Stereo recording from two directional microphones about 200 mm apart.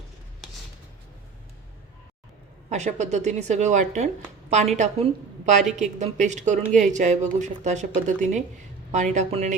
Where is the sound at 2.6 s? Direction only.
35° right (ahead or behind).